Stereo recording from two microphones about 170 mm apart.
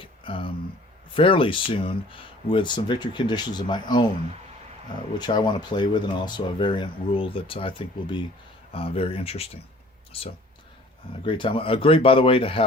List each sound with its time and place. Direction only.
0.0 s a sound: 30° left (ahead or behind)
1.1 s speech: 30° left (ahead or behind)
5.1 s speech: 25° left (ahead or behind)